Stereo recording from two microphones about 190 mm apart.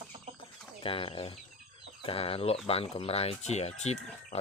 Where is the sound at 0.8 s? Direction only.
30° left (ahead or behind).